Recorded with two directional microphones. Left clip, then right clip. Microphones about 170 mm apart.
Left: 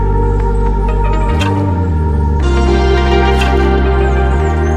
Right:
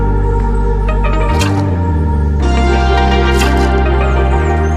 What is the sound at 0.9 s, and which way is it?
Music, centre (ahead or behind).